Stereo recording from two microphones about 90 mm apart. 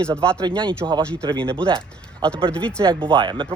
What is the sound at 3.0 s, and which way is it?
Speech, 65° right (ahead or behind).